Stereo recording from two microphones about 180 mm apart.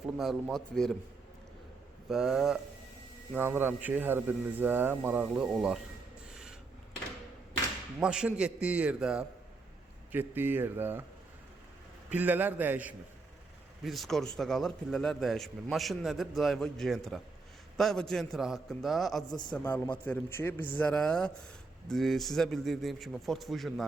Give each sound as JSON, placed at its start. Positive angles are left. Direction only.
{"t": 0.2, "sound": "speech", "side_deg": 0}
{"t": 2.0, "sound": "speech", "side_deg": 0}
{"t": 6.3, "sound": "a sound", "side_deg": -5}
{"t": 7.9, "sound": "speech", "side_deg": -5}
{"t": 12.1, "sound": "speech", "side_deg": -10}
{"t": 19.3, "sound": "a man's voice", "side_deg": 25}
{"t": 19.5, "sound": "speech", "side_deg": 10}